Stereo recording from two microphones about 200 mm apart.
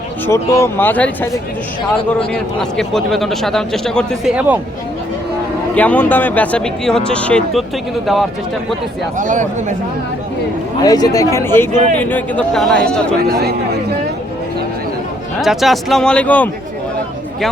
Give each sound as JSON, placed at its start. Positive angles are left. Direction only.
{"t": 0.3, "sound": "a man's voice", "side_deg": 15}
{"t": 5.7, "sound": "a man's voice", "side_deg": 10}
{"t": 9.1, "sound": "speech", "side_deg": -40}
{"t": 10.8, "sound": "a man's voice", "side_deg": 20}
{"t": 13.2, "sound": "speech", "side_deg": -50}
{"t": 15.4, "sound": "a man's voice", "side_deg": 0}